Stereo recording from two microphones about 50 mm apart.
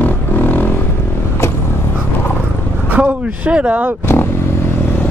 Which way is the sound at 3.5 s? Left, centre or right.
Right.